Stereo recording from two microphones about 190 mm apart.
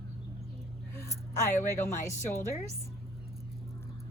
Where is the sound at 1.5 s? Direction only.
40° left (ahead or behind).